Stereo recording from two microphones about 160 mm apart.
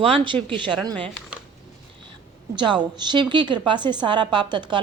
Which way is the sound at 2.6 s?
25° right (ahead or behind).